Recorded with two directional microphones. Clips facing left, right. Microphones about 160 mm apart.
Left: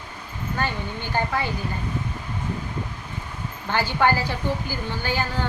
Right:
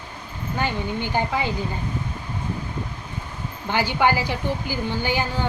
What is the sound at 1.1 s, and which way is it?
Speech, 15° right (ahead or behind).